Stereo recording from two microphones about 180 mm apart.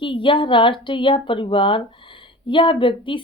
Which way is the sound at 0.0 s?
30° left (ahead or behind).